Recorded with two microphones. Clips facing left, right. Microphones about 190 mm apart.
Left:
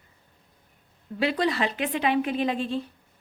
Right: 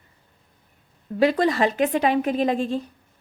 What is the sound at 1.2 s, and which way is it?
A woman's voice, 45° right (ahead or behind).